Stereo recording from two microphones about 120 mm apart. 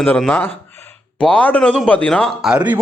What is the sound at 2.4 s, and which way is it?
Speech, 10° right (ahead or behind).